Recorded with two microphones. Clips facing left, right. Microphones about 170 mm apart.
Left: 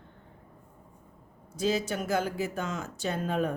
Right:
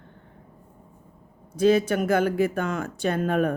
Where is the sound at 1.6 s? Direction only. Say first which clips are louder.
Right 9 dB; 60° right (ahead or behind).